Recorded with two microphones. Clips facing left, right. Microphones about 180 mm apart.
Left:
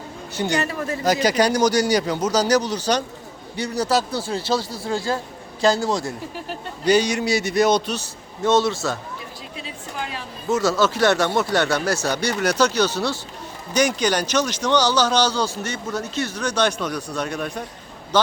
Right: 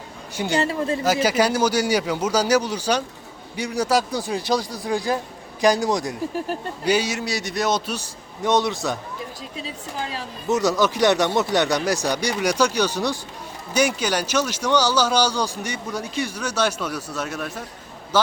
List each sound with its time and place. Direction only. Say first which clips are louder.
0.5 s a man's voice: right 4 dB; 25° right (ahead or behind)
1.0 s speech: left 2 dB; 5° right (ahead or behind)
6.8 s a man's voice: left 4 dB; 5° right (ahead or behind)
7.9 s speech: left 1 dB; 15° right (ahead or behind)
9.6 s a woman's voice: right 1 dB; 35° right (ahead or behind)
10.5 s a man's voice: even; 15° right (ahead or behind)